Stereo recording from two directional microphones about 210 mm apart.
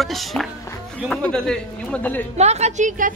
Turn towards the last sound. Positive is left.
turn(degrees=-40)  # may be behind; listen again after turning